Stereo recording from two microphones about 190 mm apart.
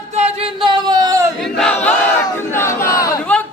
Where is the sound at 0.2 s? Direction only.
30° right (ahead or behind).